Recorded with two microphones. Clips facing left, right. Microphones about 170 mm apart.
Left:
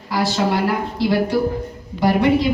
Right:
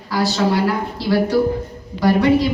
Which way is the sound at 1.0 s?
20° left (ahead or behind).